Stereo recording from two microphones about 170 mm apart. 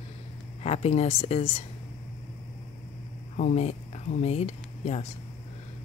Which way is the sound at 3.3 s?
45° left (ahead or behind).